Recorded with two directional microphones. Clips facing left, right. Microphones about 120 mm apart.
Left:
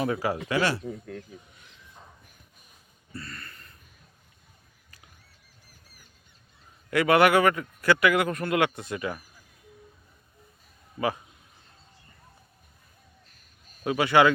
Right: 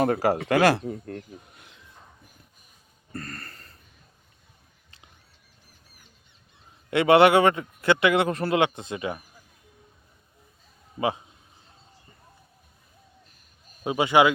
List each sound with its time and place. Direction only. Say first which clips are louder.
0.0 s speech: right 5 dB; 45° right (ahead or behind)
0.3 s speech: right 6 dB; 55° right (ahead or behind)
3.1 s a sound: right 4 dB; 45° right (ahead or behind)
6.9 s speech: right 3 dB; 25° right (ahead or behind)
10.9 s a man's voice: right 2 dB; 20° right (ahead or behind)
13.8 s speech: right 1 dB; 20° right (ahead or behind)